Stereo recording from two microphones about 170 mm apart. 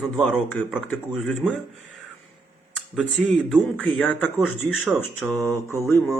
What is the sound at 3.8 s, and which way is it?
Speech, 10° left (ahead or behind).